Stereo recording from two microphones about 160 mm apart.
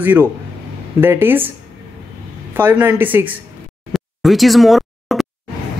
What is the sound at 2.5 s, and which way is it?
Speech, 10° right (ahead or behind).